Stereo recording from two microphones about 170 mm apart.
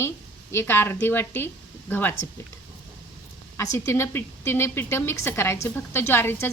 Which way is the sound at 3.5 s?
15° left (ahead or behind).